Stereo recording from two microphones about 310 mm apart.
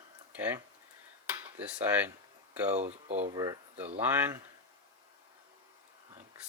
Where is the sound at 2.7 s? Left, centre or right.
Right.